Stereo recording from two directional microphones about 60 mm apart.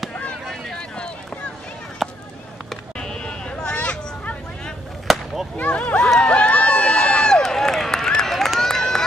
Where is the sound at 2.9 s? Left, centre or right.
Centre.